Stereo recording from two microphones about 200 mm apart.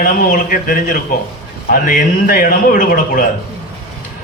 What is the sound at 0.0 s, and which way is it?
A man's voice, 45° left (ahead or behind).